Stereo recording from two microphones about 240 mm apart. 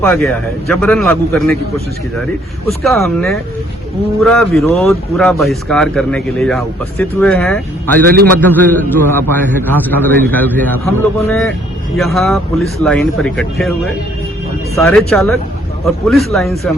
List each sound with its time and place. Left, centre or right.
0.0 s speech: centre
2.6 s speech: centre
8.0 s a man's voice: right
8.4 s a man's voice: centre